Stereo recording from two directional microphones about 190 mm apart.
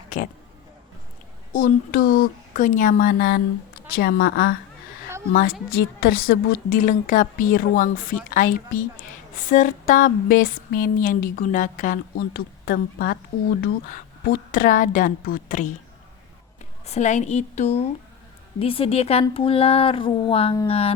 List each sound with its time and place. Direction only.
1.5 s a woman's voice: 50° left (ahead or behind)
16.8 s a woman's voice: 35° left (ahead or behind)
19.2 s a sound: 30° left (ahead or behind)
20.7 s a woman's voice: 30° left (ahead or behind)